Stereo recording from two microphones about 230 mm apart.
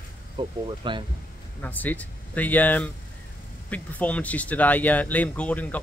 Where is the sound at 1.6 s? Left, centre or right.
Centre.